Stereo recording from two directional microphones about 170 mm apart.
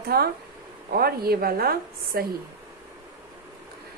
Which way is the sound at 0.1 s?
65° right (ahead or behind).